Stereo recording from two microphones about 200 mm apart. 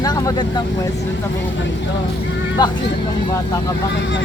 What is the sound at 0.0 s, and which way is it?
Vehicle, 20° left (ahead or behind).